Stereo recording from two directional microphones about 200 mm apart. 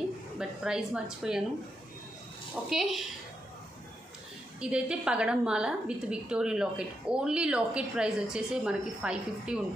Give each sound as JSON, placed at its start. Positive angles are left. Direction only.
{"t": 0.4, "sound": "a woman's voice", "side_deg": -5}
{"t": 2.7, "sound": "a woman's voice", "side_deg": 0}
{"t": 4.6, "sound": "a woman's voice", "side_deg": -5}